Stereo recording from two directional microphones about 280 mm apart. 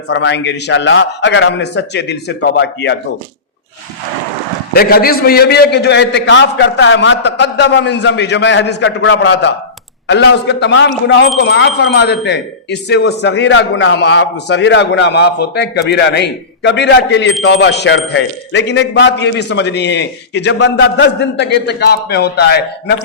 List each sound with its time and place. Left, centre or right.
0.1 s a man's voice: left
4.7 s a man's voice: left